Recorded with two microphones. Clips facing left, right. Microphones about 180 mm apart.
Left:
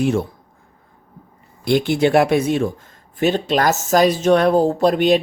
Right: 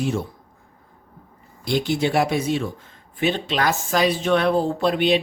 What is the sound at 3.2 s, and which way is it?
Speech, 45° left (ahead or behind).